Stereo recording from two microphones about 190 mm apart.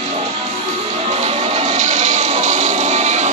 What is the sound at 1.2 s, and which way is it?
Music, 40° right (ahead or behind).